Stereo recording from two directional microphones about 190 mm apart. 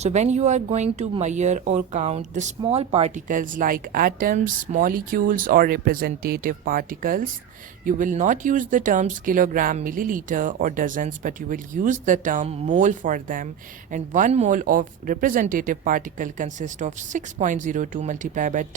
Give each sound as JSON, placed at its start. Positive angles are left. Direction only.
{"t": 0.0, "sound": "speech", "side_deg": -35}